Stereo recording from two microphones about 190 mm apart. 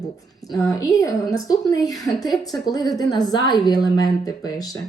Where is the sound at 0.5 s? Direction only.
20° left (ahead or behind).